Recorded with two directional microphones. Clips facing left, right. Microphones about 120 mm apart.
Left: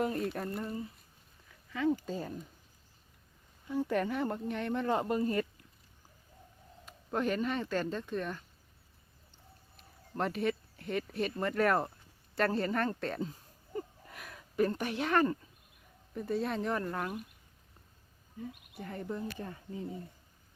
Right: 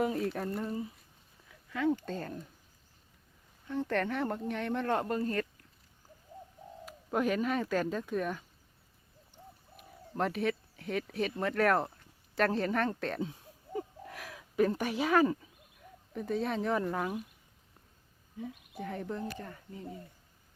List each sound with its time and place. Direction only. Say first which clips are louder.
0.0 s speech: right 2 dB; centre (ahead or behind)
3.7 s speech: even; 10° left (ahead or behind)
6.8 s speech: right 2 dB; 5° right (ahead or behind)
10.2 s speech: right 1 dB; centre (ahead or behind)
12.3 s a sound: right 1 dB; centre (ahead or behind)
16.1 s speech: right 1 dB; centre (ahead or behind)
18.3 s speech: right 3 dB; centre (ahead or behind)
19.4 s speech: left 3 dB; 20° left (ahead or behind)